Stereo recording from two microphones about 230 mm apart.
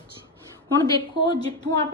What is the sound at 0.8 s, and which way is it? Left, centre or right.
Speech, centre.